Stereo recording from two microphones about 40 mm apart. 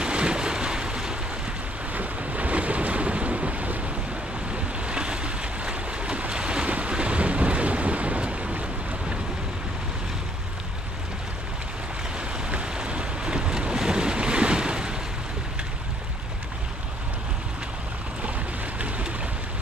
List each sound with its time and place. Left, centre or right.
0.0 s boat: right
2.0 s waves: right
12.4 s boat: right